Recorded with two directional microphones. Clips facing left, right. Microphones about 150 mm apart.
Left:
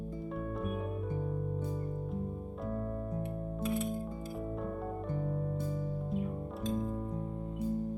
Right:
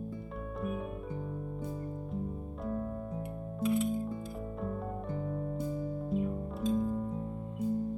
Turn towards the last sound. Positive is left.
turn(degrees=0)  # may be behind; listen again after turning